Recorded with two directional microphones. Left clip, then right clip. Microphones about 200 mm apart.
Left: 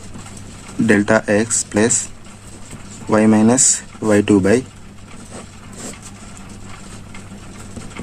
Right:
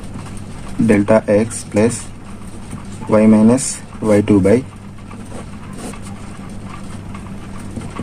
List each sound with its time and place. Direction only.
0.9 s speech: 35° left (ahead or behind)
3.1 s speech: 35° left (ahead or behind)